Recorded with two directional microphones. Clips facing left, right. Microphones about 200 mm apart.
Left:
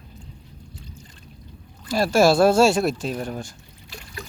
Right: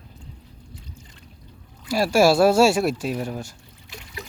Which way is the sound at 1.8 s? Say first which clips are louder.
Even; 10° right (ahead or behind).